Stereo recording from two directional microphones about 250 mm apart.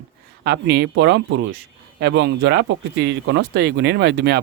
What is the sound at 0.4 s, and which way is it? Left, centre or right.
Speech, right.